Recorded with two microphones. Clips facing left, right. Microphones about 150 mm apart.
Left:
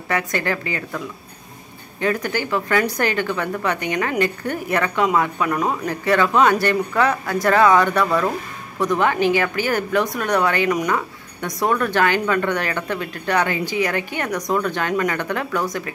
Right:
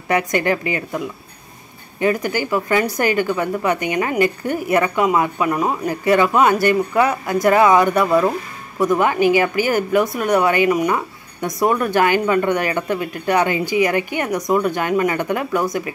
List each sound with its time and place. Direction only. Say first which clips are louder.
0.1 s a woman's voice: right 5 dB; 15° right (ahead or behind)